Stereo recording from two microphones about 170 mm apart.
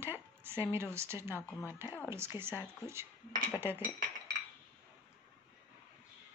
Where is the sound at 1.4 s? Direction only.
10° left (ahead or behind).